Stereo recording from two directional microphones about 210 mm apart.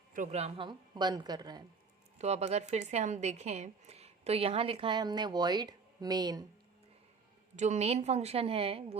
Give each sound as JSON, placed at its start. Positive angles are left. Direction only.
{"t": 0.1, "sound": "a woman's voice", "side_deg": -35}
{"t": 2.1, "sound": "a woman's voice", "side_deg": -30}
{"t": 7.5, "sound": "a woman's voice", "side_deg": -35}